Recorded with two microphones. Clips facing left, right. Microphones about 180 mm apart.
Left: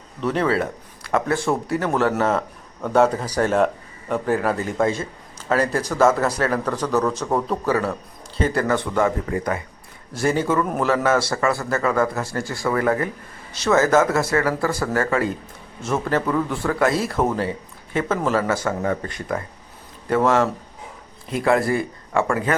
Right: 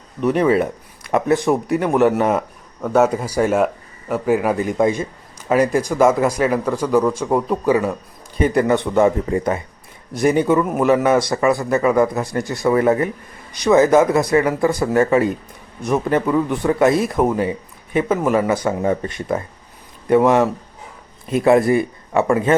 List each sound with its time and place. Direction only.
0.2 s speech: 15° right (ahead or behind)